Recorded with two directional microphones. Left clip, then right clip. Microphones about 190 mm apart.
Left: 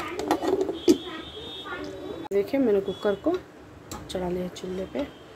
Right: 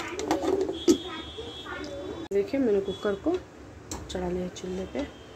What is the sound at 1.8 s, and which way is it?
Speech, 15° left (ahead or behind).